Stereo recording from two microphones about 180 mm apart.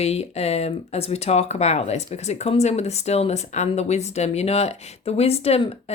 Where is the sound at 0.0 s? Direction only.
35° left (ahead or behind).